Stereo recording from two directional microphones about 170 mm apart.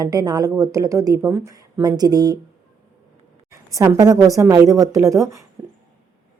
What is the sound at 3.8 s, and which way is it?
A woman's voice, 20° right (ahead or behind).